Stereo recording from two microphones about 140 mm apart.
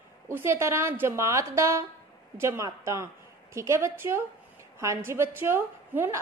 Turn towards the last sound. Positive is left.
turn(degrees=-15)  # may be behind; listen again after turning